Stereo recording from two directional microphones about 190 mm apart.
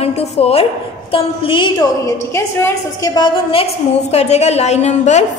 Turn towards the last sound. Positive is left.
turn(degrees=35)  # may be behind; listen again after turning